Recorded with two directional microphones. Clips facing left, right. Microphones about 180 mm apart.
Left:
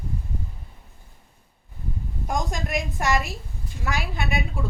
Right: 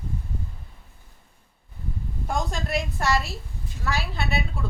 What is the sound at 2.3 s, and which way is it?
A woman's voice, 15° left (ahead or behind).